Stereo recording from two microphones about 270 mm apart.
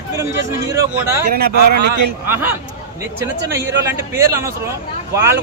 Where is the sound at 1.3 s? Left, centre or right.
Right.